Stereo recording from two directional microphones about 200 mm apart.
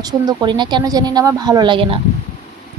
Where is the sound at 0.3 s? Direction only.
20° right (ahead or behind).